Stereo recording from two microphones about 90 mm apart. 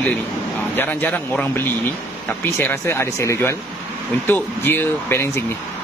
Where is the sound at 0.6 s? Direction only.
20° left (ahead or behind).